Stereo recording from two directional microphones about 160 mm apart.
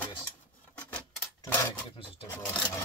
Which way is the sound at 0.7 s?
10° left (ahead or behind).